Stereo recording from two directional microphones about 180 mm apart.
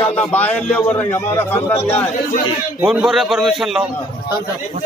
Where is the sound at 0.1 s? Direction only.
10° left (ahead or behind).